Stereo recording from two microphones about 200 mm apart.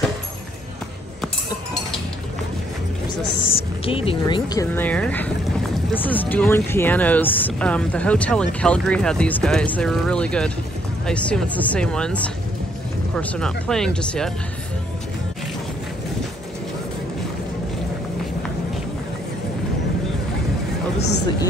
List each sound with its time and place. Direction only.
3.5 s speech: 30° left (ahead or behind); by 14.3 s 5° left (ahead or behind)